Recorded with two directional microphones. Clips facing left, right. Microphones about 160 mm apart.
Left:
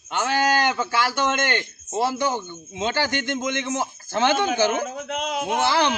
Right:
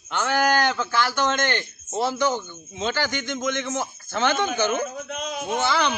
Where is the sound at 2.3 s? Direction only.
25° left (ahead or behind).